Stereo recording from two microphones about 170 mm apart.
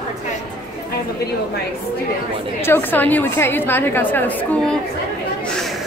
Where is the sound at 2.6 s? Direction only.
10° left (ahead or behind).